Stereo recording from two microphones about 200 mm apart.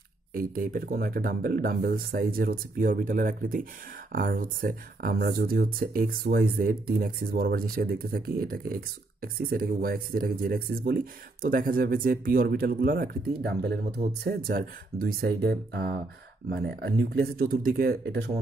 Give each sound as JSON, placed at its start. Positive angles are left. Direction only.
{"t": 0.3, "sound": "speech", "side_deg": -45}